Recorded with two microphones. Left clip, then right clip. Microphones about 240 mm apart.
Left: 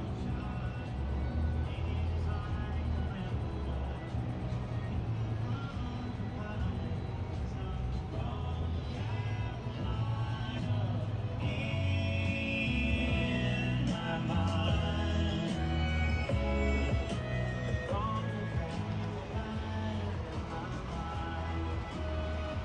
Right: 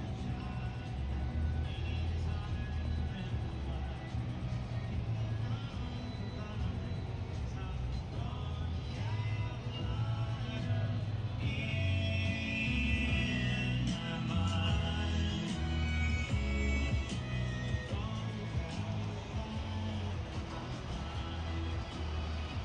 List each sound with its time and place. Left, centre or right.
11.6 s music: centre